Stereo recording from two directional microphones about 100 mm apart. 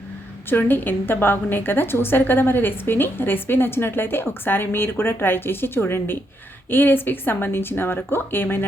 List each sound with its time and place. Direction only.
0.5 s a woman's voice: 20° left (ahead or behind)